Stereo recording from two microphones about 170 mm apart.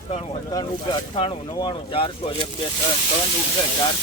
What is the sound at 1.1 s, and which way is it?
Speech, 30° left (ahead or behind).